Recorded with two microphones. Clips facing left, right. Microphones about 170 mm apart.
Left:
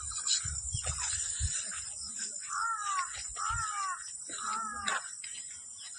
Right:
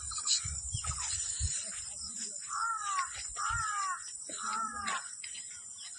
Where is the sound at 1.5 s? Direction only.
80° left.